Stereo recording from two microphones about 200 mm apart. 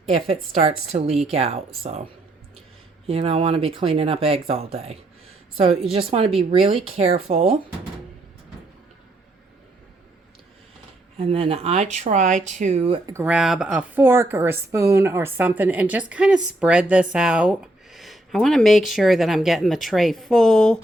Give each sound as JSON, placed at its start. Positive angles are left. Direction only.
{"t": 0.1, "sound": "speech", "side_deg": -30}
{"t": 3.1, "sound": "speech", "side_deg": -30}
{"t": 11.2, "sound": "speech", "side_deg": -30}
{"t": 13.1, "sound": "speech", "side_deg": -5}